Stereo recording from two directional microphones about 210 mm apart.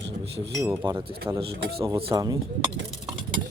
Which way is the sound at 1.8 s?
25° right (ahead or behind).